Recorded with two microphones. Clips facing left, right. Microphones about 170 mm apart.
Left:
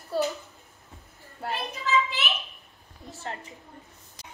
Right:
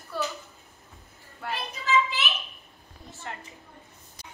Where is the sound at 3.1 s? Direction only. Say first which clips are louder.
Left 3 dB; 35° left (ahead or behind).